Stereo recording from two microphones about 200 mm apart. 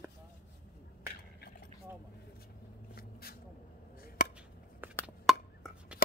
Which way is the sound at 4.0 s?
50° left (ahead or behind).